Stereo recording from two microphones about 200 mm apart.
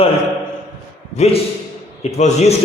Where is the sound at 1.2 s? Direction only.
35° left (ahead or behind).